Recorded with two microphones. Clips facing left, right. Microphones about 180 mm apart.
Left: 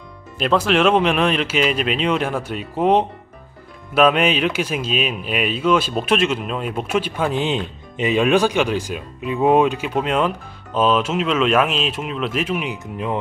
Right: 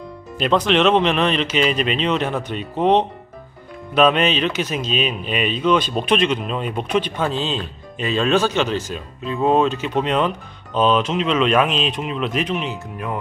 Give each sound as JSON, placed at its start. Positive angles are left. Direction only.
{"t": 0.3, "sound": "speech", "side_deg": 5}